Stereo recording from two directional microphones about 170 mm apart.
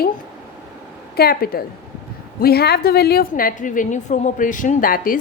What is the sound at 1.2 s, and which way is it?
A woman's voice, 65° left (ahead or behind).